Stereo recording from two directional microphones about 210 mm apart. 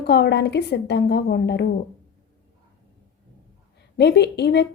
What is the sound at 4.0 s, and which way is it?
Speech, 50° left (ahead or behind).